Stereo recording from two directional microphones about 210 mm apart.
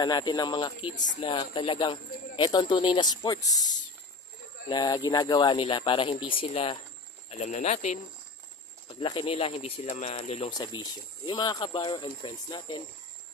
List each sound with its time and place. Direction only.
0.0 s speech: 20° left (ahead or behind)